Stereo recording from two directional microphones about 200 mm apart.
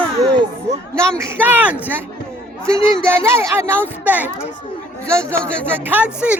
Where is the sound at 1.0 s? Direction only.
10° right (ahead or behind).